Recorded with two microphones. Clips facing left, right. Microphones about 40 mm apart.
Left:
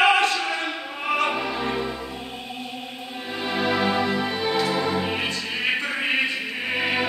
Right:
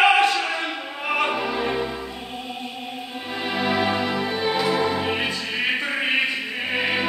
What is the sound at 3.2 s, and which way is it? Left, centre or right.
Music, centre.